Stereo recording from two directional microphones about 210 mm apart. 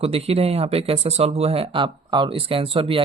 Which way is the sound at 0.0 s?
30° right (ahead or behind).